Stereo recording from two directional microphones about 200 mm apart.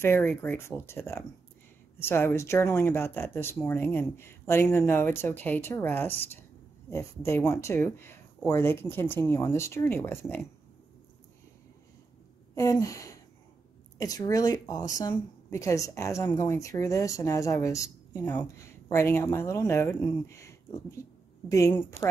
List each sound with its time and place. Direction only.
0.0 s speech: 10° left (ahead or behind)
12.5 s speech: 15° left (ahead or behind)